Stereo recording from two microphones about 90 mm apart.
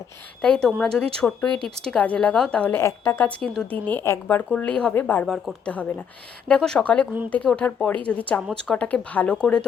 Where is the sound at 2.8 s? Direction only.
25° left (ahead or behind).